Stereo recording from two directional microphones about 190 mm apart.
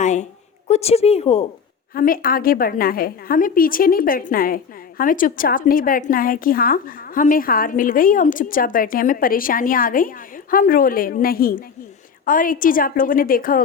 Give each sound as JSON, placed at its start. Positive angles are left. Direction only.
{"t": 0.0, "sound": "a sound", "side_deg": 40}
{"t": 0.7, "sound": "a woman's voice", "side_deg": 35}
{"t": 1.9, "sound": "a woman's voice", "side_deg": 50}